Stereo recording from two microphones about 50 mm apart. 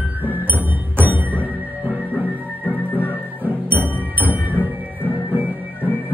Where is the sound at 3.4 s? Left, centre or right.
Right.